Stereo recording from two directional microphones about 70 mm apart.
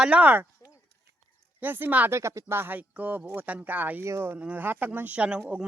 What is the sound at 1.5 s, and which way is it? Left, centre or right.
Speech, right.